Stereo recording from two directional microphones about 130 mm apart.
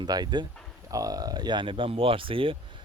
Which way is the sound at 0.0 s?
35° right (ahead or behind).